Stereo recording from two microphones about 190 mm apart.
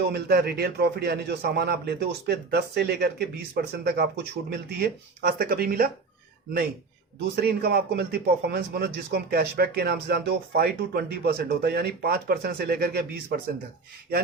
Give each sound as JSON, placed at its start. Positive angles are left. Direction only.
{"t": 0.0, "sound": "a man's voice", "side_deg": -60}
{"t": 7.3, "sound": "a man's voice", "side_deg": -55}